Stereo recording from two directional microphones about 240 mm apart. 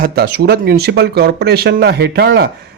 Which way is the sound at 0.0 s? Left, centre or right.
Right.